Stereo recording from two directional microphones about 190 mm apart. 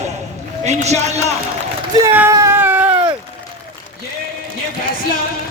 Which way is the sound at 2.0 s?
15° right (ahead or behind).